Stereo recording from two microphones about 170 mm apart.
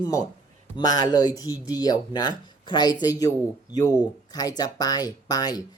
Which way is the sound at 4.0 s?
20° left (ahead or behind).